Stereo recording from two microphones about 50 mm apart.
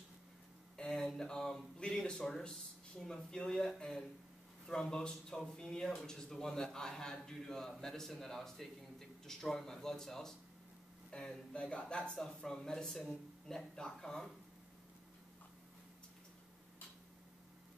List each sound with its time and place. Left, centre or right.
0.9 s a man's voice: centre